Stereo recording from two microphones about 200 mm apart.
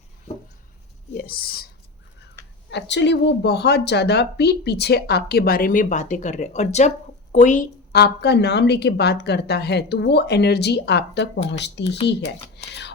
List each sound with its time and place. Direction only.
1.1 s speech: 50° left (ahead or behind)
2.6 s a woman's voice: 60° left (ahead or behind); by 7.7 s 40° left (ahead or behind)
7.9 s speech: 55° left (ahead or behind)